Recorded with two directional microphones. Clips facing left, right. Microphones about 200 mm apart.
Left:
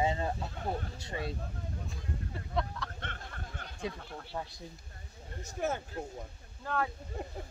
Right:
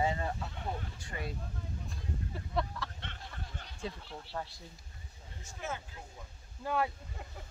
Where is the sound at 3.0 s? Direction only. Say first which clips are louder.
Left 3 dB; 50° left (ahead or behind).